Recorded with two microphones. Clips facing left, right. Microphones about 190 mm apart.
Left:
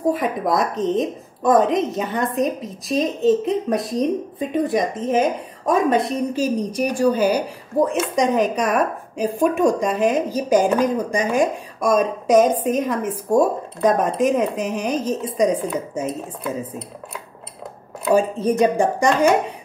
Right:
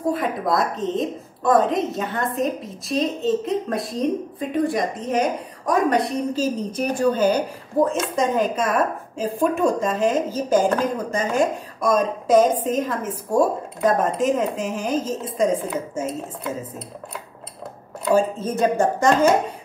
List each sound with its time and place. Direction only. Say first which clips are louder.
0.1 s a woman's voice: right 1 dB; 20° left (ahead or behind)
18.0 s speech: left 2 dB; 15° left (ahead or behind)